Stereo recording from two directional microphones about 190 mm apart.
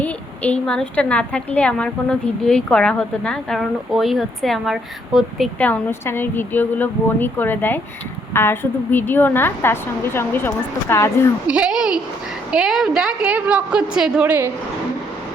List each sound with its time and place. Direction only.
0.0 s a woman's voice: 5° left (ahead or behind)
11.4 s a woman's voice: 5° right (ahead or behind)